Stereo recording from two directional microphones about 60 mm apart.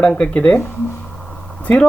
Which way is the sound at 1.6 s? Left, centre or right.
Left.